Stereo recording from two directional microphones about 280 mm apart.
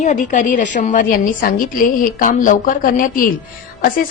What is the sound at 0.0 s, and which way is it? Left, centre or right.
A woman's voice, left.